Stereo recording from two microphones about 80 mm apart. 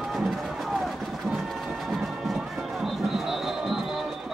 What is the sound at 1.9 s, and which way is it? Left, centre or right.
Music, centre.